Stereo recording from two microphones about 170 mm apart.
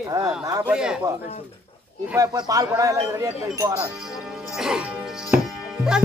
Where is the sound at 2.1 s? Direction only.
20° right (ahead or behind).